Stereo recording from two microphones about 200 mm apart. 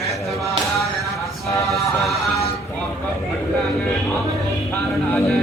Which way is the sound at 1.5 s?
15° left (ahead or behind).